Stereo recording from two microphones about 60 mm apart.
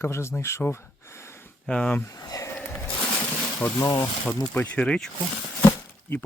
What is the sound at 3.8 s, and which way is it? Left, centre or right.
Speech, left.